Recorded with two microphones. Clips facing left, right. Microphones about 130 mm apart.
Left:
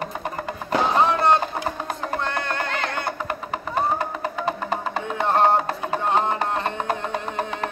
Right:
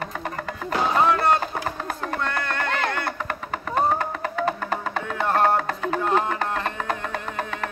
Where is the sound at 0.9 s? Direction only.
25° left (ahead or behind).